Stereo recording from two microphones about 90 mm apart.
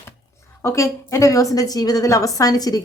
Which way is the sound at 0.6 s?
35° left (ahead or behind).